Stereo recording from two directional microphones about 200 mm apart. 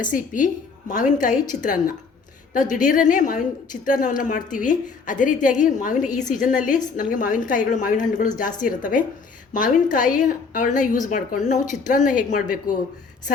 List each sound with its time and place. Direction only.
0.0 s a woman's voice: 40° left (ahead or behind)
2.5 s a woman's voice: 40° left (ahead or behind)